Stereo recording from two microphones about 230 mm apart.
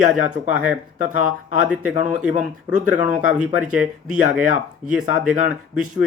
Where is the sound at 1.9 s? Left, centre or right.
Right.